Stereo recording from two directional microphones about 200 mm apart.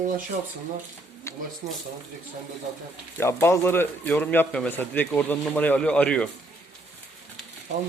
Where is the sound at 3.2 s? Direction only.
10° left (ahead or behind).